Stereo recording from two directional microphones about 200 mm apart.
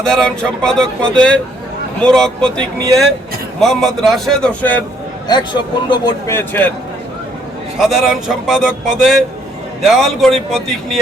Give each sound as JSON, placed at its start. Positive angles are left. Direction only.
{"t": 0.0, "sound": "speech", "side_deg": 5}
{"t": 5.3, "sound": "a man's voice", "side_deg": 20}
{"t": 7.8, "sound": "speech", "side_deg": 0}